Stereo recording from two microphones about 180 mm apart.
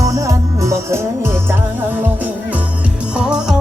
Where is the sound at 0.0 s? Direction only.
20° right (ahead or behind).